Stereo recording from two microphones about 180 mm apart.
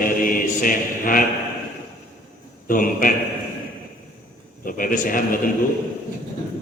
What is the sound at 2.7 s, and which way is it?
Speech, 50° left (ahead or behind).